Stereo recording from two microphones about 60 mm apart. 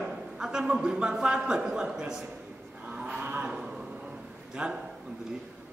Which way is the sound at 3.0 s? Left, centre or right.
Centre.